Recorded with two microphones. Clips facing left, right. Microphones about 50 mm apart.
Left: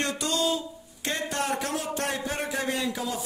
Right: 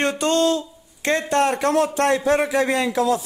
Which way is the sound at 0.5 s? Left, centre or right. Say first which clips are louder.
Right 7 dB; right.